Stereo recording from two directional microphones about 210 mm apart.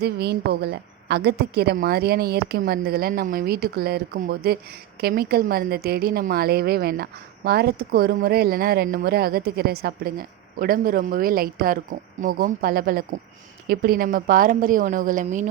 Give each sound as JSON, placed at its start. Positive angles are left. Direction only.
{"t": 0.0, "sound": "a woman's voice", "side_deg": -50}